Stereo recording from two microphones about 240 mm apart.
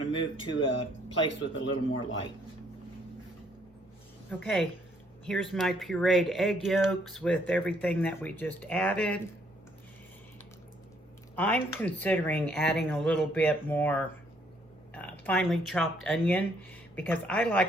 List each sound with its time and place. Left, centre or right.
0.1 s speech: left
1.3 s speech: left
4.3 s speech: centre
11.3 s speech: centre